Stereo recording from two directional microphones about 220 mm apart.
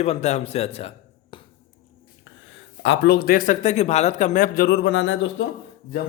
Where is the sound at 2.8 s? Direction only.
55° left (ahead or behind).